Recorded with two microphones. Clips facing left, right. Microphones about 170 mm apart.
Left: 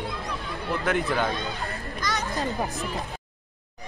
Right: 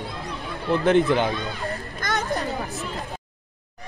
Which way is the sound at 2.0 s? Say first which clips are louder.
Right 2 dB; 55° right (ahead or behind).